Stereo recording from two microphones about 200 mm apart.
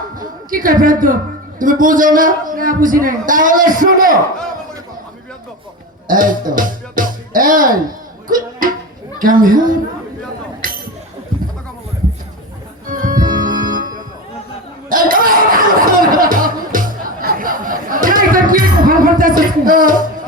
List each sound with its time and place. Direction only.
0.2 s a woman's voice: 45° right (ahead or behind)
6.1 s a woman's voice: 45° right (ahead or behind)
6.5 s music: 45° right (ahead or behind)
9.1 s a woman's voice: 45° right (ahead or behind)
10.6 s a sound: 45° right (ahead or behind)
12.9 s organ: 45° right (ahead or behind)
14.8 s a sound: 45° right (ahead or behind)